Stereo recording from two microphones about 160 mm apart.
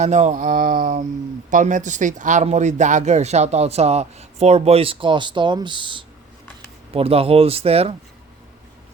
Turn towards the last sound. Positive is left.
turn(degrees=-40)  # may be behind; listen again after turning